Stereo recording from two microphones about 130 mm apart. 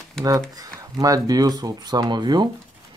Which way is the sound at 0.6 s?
25° right (ahead or behind).